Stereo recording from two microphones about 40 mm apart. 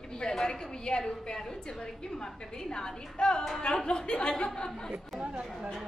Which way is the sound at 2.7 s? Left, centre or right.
Centre.